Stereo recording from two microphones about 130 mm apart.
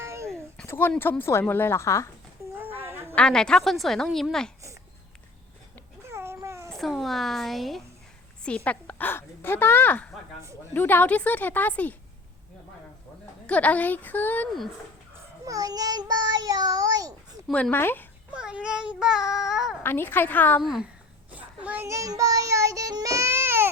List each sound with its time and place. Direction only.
0.0 s a sound: 20° right (ahead or behind)
0.7 s a woman's voice: 15° left (ahead or behind)
2.6 s a sound: 15° right (ahead or behind)
3.2 s a woman's voice: 5° left (ahead or behind)
6.1 s a sound: 20° right (ahead or behind)
6.7 s a woman's voice: centre (ahead or behind)
13.5 s a woman's voice: 10° left (ahead or behind)
15.4 s baby cry: 30° right (ahead or behind)
17.5 s a woman's voice: 15° left (ahead or behind)
18.3 s a woman's voice: 5° right (ahead or behind)
19.8 s a woman's voice: 15° left (ahead or behind)
20.6 s a woman's voice: centre (ahead or behind)
21.3 s a sound: 10° right (ahead or behind)
21.8 s baby cry: 25° right (ahead or behind)